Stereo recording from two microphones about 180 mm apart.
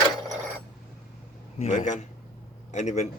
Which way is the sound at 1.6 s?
45° left (ahead or behind).